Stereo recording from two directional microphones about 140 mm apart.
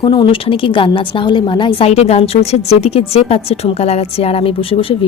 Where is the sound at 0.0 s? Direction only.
35° left (ahead or behind).